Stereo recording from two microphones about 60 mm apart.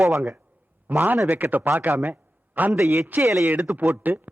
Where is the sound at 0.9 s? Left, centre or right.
Right.